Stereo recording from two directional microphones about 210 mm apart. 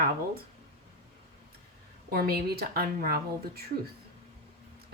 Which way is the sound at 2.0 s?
45° right (ahead or behind).